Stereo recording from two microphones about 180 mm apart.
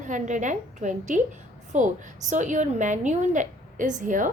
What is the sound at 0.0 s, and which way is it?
A woman's voice, 45° right (ahead or behind).